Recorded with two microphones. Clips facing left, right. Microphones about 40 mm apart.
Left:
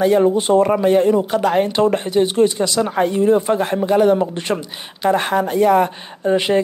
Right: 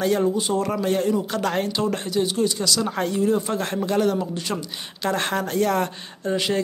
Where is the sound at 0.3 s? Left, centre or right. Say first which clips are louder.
Left 9 dB; left; by 1.7 s centre.